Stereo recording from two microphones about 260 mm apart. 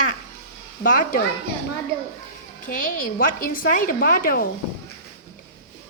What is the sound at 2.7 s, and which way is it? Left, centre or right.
A woman's voice, left.